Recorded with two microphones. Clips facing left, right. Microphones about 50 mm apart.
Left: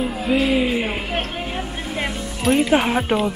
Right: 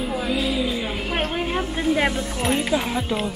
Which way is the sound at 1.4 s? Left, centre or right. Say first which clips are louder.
Right 4 dB; centre.